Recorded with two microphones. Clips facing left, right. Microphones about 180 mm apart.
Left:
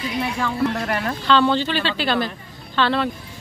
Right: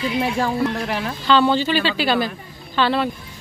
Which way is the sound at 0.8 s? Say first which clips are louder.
Even; 5° right (ahead or behind).